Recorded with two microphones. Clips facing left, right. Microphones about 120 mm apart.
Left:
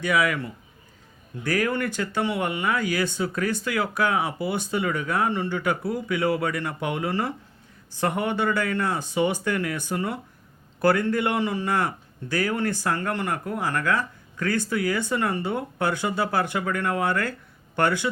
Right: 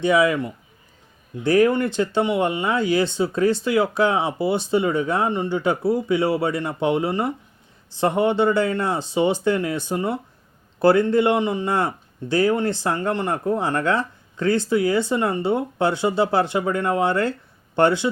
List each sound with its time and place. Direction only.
0.0 s a man's voice: 25° right (ahead or behind)